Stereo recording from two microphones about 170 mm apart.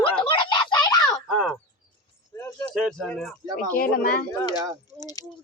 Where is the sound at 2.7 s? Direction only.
Centre (ahead or behind).